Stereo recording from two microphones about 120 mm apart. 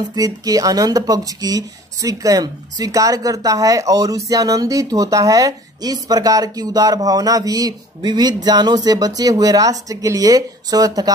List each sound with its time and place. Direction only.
0.1 s a woman's voice: 30° right (ahead or behind)